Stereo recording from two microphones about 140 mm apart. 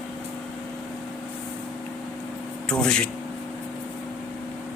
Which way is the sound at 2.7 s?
5° left (ahead or behind).